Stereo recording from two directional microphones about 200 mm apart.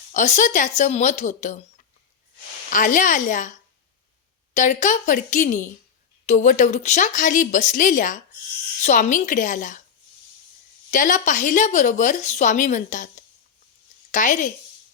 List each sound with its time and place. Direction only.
0.1 s a woman's voice: 35° left (ahead or behind)
2.6 s a woman's voice: 40° left (ahead or behind)
4.5 s a woman's voice: 40° left (ahead or behind)
10.9 s a woman's voice: 40° left (ahead or behind)
14.1 s a woman's voice: 40° left (ahead or behind)